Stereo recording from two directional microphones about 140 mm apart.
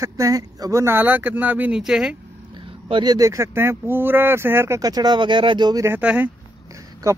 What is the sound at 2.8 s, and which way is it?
Speech, 35° right (ahead or behind).